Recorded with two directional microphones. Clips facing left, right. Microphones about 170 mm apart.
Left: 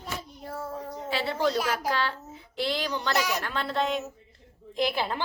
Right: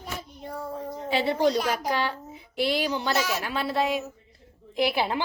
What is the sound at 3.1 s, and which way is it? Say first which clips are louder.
Speech: right 1 dB; 15° left (ahead or behind).